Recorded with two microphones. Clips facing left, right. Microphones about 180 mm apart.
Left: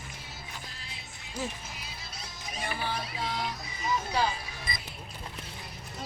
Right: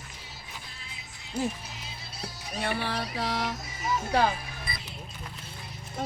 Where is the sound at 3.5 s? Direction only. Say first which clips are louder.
Right 1 dB; 45° right (ahead or behind).